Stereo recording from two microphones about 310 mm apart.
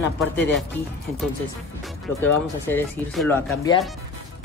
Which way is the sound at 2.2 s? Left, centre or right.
Centre.